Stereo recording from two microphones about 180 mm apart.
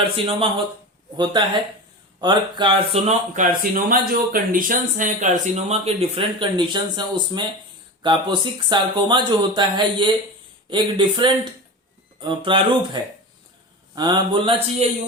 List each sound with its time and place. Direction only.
0.0 s speech: 30° right (ahead or behind)